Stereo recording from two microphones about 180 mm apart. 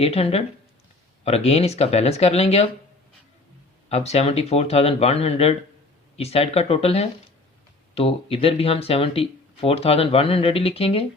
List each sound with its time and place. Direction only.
0.0 s speech: 35° left (ahead or behind)
3.8 s speech: 35° left (ahead or behind)